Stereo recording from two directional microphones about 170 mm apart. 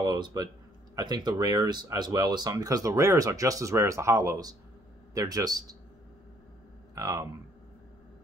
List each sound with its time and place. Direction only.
0.0 s a sound: 25° right (ahead or behind)
0.9 s speech: 25° right (ahead or behind)
7.0 s speech: 20° right (ahead or behind)